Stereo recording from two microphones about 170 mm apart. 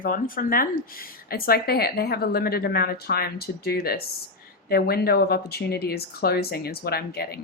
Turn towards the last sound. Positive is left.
turn(degrees=65)  # may be behind; listen again after turning